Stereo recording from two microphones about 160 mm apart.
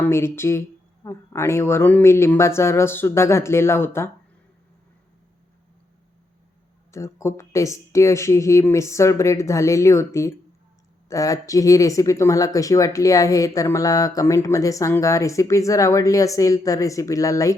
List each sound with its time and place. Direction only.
0.0 s a man's voice: 15° left (ahead or behind)
6.9 s speech: 20° left (ahead or behind)